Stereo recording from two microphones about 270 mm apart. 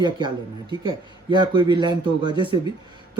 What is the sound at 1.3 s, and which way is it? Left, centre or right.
Speech, centre.